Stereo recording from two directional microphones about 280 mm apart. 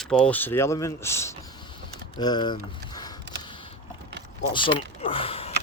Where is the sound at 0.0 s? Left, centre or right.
Centre.